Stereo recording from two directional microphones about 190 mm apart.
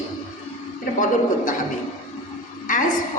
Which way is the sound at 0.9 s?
45° left (ahead or behind).